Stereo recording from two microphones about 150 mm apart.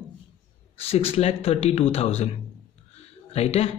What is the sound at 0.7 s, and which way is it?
A man's voice, 40° left (ahead or behind).